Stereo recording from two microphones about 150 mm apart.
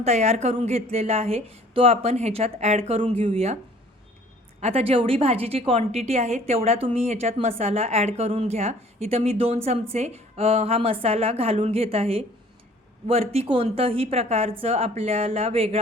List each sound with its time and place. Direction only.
0.0 s speech: 45° right (ahead or behind)
4.6 s a woman's voice: 40° right (ahead or behind)